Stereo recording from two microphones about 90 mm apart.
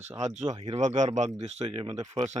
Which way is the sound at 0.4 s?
50° right (ahead or behind).